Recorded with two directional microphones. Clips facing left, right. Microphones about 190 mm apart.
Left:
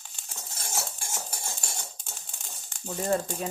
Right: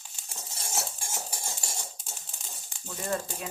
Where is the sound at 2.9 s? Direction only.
40° left (ahead or behind).